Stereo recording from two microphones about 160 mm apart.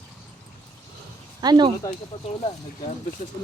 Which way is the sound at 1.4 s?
25° right (ahead or behind).